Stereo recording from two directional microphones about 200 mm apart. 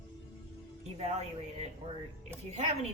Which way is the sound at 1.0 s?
35° right (ahead or behind).